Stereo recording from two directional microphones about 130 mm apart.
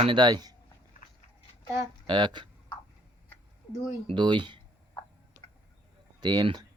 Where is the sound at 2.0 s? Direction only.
35° right (ahead or behind).